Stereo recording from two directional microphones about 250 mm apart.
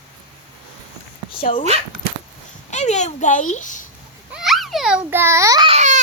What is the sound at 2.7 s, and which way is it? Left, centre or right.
Speech, left.